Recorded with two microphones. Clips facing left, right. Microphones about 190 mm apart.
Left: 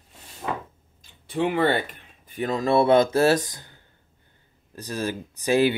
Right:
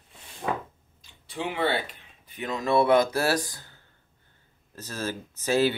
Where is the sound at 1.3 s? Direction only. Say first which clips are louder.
Left 6 dB; 55° left (ahead or behind).